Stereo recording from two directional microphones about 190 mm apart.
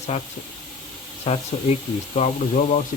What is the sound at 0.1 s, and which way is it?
Speech, 30° left (ahead or behind).